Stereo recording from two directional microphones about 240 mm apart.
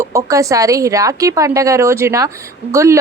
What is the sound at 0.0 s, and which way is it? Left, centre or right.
Speech, centre.